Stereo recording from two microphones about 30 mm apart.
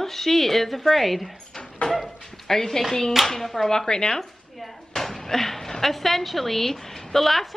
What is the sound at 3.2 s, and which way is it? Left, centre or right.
Speech, centre.